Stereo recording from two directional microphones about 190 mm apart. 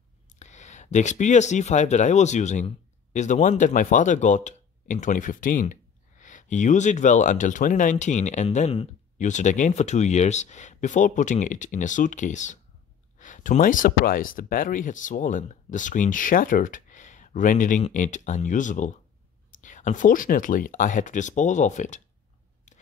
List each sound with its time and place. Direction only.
0.4 s speech: 40° left (ahead or behind)